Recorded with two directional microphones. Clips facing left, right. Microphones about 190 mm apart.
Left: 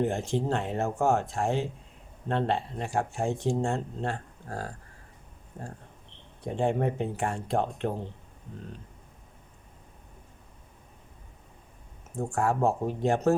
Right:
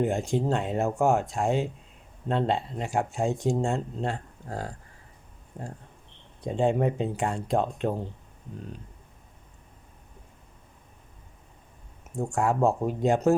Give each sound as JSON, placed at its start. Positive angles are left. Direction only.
{"t": 0.0, "sound": "speech", "side_deg": -15}
{"t": 6.4, "sound": "speech", "side_deg": -15}
{"t": 12.3, "sound": "speech", "side_deg": -15}